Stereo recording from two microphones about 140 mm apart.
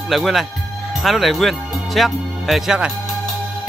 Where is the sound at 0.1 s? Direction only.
Centre (ahead or behind).